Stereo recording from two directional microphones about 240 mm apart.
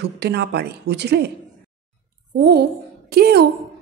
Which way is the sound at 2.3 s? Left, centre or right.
Right.